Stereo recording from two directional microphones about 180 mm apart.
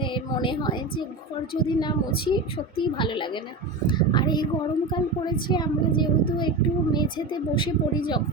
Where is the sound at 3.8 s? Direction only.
25° left (ahead or behind).